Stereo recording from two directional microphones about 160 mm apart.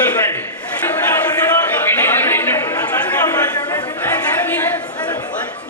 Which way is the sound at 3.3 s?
25° left (ahead or behind).